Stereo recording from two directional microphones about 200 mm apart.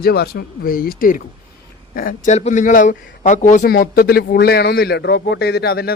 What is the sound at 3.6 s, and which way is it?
A man's voice, 50° left (ahead or behind).